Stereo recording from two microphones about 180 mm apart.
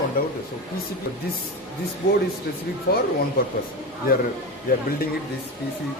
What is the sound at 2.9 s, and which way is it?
Speech, 60° left (ahead or behind).